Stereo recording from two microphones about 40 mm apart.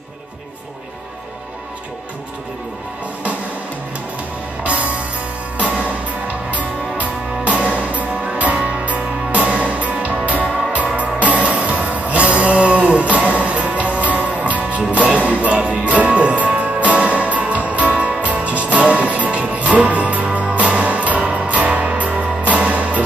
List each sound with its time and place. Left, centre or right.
5.6 s music: right